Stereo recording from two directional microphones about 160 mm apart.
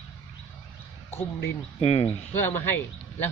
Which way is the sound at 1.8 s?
40° left (ahead or behind).